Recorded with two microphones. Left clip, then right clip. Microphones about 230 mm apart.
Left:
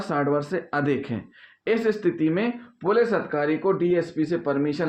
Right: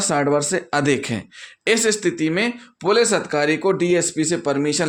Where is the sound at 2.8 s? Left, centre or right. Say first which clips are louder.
Right 4 dB; right.